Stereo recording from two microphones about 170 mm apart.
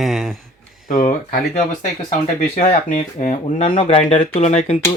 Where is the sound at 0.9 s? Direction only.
45° left (ahead or behind).